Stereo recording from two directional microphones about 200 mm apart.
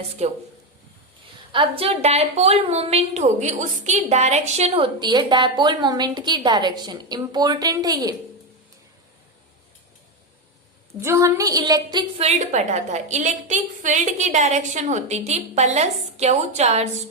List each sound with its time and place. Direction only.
0.2 s a woman's voice: 35° right (ahead or behind)
1.5 s a woman's voice: 30° right (ahead or behind)
11.0 s a woman's voice: 15° right (ahead or behind); by 16.9 s 30° right (ahead or behind)